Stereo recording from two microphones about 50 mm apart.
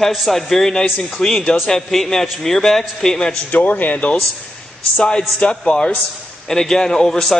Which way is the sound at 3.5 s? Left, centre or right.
Left.